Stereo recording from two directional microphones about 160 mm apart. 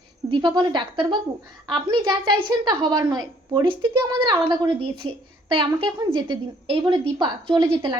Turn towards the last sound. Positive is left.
turn(degrees=-30)  # may be behind; listen again after turning